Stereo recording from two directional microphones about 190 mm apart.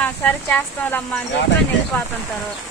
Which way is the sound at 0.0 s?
10° left (ahead or behind).